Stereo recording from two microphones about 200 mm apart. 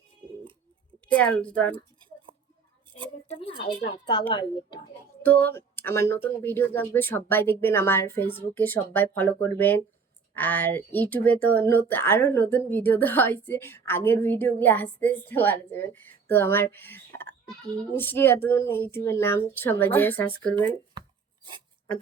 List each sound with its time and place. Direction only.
1.0 s speech: 5° left (ahead or behind)
3.2 s speech: 25° left (ahead or behind)
5.2 s speech: 10° left (ahead or behind)